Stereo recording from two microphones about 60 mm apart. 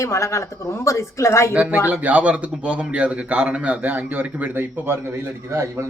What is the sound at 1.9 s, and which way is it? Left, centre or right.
A man's voice, right.